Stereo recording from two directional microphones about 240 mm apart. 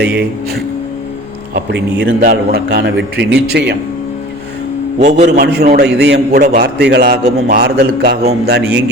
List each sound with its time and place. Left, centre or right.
0.0 s a man's voice: right
1.5 s a man's voice: right
4.9 s a man's voice: right
5.5 s a man's voice: right